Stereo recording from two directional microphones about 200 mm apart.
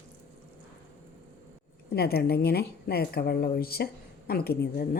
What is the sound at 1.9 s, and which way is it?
Speech, 55° left (ahead or behind).